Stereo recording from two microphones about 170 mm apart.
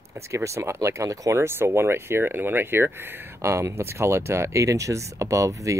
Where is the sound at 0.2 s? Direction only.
15° right (ahead or behind).